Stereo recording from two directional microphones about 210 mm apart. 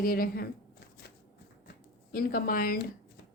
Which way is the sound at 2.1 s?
45° left (ahead or behind).